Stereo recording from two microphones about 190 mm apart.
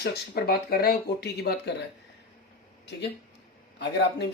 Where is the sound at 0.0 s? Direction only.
55° left (ahead or behind).